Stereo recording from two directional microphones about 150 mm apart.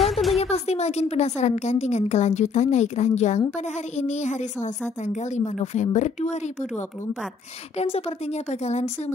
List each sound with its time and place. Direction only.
0.0 s a sound: centre (ahead or behind)
0.4 s a woman's voice: 45° left (ahead or behind)
8.5 s a woman's voice: 45° left (ahead or behind)